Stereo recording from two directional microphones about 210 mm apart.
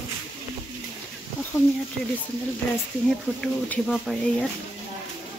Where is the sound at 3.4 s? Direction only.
5° left (ahead or behind).